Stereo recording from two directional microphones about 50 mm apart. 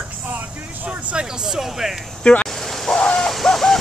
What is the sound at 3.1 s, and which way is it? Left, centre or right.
Bird, centre.